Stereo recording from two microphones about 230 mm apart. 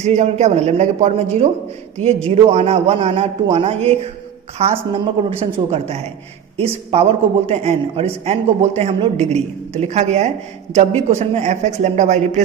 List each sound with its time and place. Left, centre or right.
0.0 s a woman's voice: right